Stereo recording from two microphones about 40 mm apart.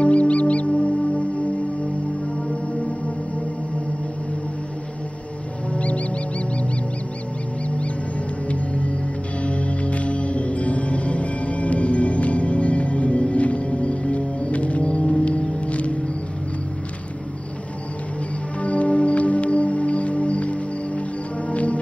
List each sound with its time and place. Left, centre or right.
0.0 s music: left
5.7 s music: left
8.5 s music: left
18.6 s music: left